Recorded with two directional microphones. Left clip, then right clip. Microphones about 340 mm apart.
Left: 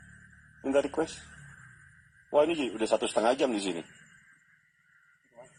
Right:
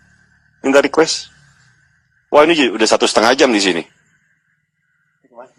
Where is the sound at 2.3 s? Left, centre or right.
Right.